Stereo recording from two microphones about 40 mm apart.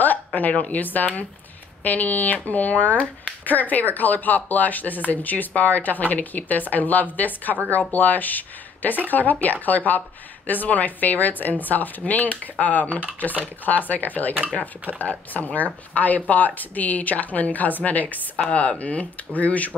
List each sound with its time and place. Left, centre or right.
0.0 s speech: left